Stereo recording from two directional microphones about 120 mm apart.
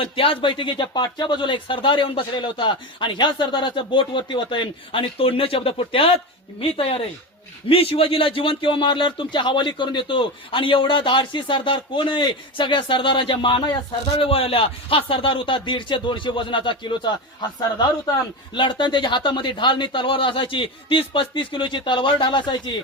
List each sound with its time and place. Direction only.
0.0 s speech: 50° left (ahead or behind)
18.5 s speech: 40° left (ahead or behind)